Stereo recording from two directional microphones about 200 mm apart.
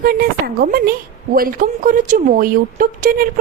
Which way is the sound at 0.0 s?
50° right (ahead or behind).